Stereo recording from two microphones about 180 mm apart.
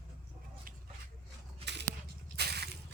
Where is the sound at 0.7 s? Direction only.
50° right (ahead or behind).